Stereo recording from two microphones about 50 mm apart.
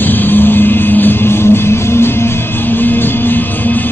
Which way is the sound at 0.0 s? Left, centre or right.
Left.